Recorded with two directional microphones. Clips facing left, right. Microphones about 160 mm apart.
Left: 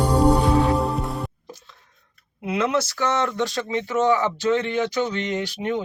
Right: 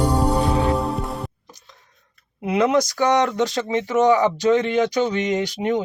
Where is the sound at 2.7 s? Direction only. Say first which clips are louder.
Right 5 dB; 15° right (ahead or behind).